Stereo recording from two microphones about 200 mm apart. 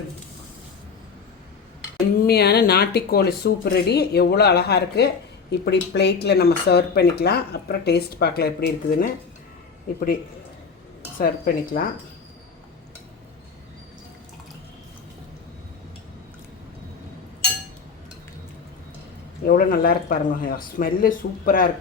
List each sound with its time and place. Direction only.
2.2 s speech: 55° left (ahead or behind)
11.2 s speech: 45° left (ahead or behind)
19.5 s speech: 45° left (ahead or behind)